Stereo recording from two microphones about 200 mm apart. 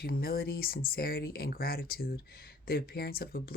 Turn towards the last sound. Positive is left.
turn(degrees=50)  # may be behind; listen again after turning